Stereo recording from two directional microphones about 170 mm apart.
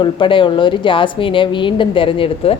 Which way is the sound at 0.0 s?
30° left (ahead or behind).